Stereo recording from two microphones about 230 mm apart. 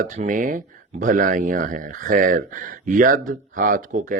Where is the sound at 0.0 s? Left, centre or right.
Right.